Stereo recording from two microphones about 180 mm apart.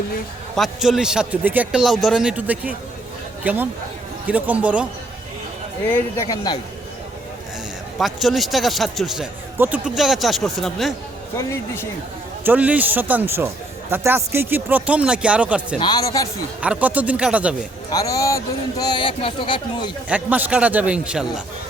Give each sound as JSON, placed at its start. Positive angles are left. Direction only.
{"t": 0.5, "sound": "speech", "side_deg": 0}
{"t": 5.9, "sound": "speech", "side_deg": 15}
{"t": 7.9, "sound": "speech", "side_deg": 0}
{"t": 11.5, "sound": "speech", "side_deg": 15}
{"t": 12.5, "sound": "speech", "side_deg": -10}
{"t": 15.8, "sound": "speech", "side_deg": 25}
{"t": 16.6, "sound": "speech", "side_deg": -10}
{"t": 17.9, "sound": "speech", "side_deg": 20}
{"t": 20.1, "sound": "speech", "side_deg": -10}